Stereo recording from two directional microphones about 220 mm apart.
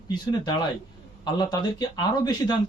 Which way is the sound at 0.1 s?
20° left (ahead or behind).